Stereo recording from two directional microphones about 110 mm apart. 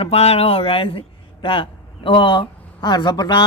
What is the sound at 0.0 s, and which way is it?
A man's voice, 65° left (ahead or behind).